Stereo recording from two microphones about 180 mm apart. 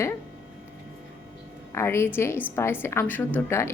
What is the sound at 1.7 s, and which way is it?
A woman's voice, 15° left (ahead or behind).